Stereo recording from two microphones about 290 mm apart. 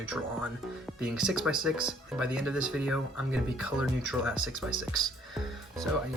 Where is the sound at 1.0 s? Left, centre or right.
Centre.